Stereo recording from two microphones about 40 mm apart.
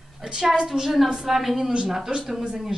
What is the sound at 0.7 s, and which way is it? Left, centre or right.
A woman's voice, centre.